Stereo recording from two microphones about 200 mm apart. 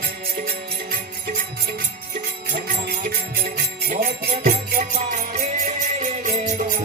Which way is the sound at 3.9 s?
40° right (ahead or behind).